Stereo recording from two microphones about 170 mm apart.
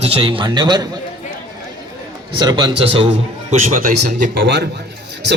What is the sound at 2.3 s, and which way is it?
Speech, 25° right (ahead or behind).